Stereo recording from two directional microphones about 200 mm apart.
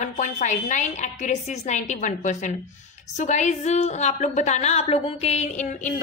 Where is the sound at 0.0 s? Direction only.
40° left (ahead or behind).